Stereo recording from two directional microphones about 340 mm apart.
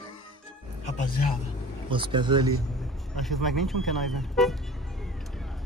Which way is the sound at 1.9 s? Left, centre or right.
Centre.